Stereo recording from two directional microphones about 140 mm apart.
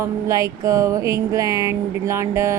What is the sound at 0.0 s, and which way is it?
Speech, 25° right (ahead or behind).